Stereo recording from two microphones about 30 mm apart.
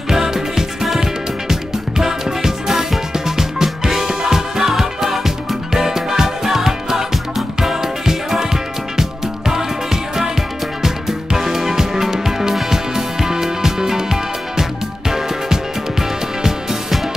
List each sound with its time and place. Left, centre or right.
0.1 s music: centre
10.8 s music: centre